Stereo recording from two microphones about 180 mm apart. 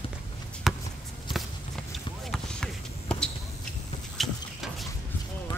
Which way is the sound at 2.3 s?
5° left (ahead or behind).